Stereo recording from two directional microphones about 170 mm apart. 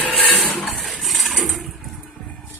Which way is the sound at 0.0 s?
5° left (ahead or behind).